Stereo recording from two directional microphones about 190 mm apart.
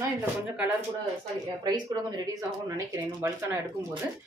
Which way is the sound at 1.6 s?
20° right (ahead or behind).